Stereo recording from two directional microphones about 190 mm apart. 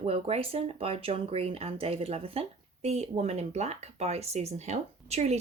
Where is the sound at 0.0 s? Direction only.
30° right (ahead or behind).